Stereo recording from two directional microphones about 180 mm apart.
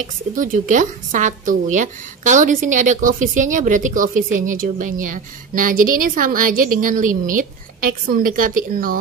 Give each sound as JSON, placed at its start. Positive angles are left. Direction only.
{"t": 0.0, "sound": "a woman's voice", "side_deg": -45}